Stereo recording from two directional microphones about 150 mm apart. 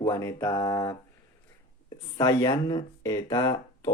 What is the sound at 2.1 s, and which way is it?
Speech, 25° left (ahead or behind).